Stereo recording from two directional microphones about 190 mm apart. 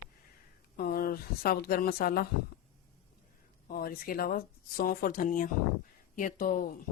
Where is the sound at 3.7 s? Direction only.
50° left (ahead or behind).